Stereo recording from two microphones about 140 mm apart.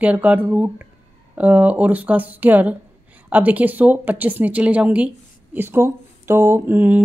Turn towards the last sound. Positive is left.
turn(degrees=-15)  # may be behind; listen again after turning